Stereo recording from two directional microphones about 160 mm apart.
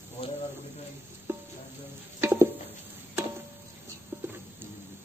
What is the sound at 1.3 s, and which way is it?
Music, 15° right (ahead or behind).